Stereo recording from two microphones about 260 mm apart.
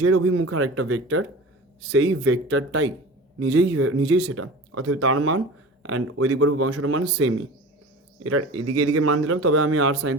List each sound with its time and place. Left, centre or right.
0.0 s speech: right